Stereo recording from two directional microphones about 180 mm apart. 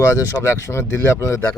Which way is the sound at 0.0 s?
15° left (ahead or behind).